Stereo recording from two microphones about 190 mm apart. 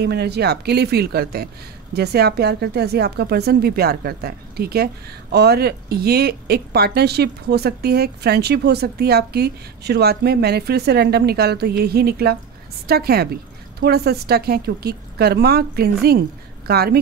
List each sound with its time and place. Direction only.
0.0 s speech: 60° right (ahead or behind)